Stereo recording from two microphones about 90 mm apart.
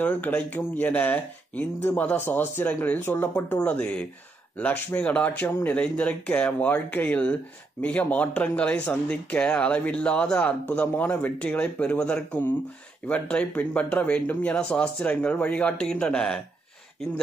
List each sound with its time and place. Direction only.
0.0 s speech: 20° left (ahead or behind)
3.5 s speech: 10° left (ahead or behind)